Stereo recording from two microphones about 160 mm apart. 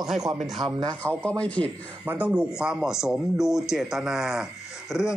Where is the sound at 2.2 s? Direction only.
5° right (ahead or behind).